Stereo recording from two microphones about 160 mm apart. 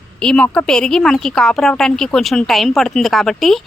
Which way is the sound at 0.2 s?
5° left (ahead or behind).